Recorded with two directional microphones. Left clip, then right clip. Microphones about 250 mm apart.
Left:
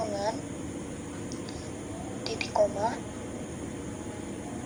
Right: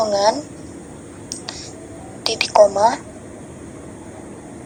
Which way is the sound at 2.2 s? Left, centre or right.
Right.